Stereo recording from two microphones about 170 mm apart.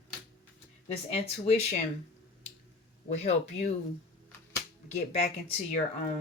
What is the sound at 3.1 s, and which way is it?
Speech, 40° left (ahead or behind).